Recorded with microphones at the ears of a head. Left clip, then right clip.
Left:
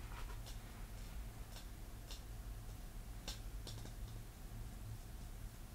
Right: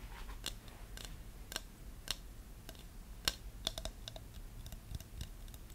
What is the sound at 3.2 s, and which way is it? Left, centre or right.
Computer keyboard, right.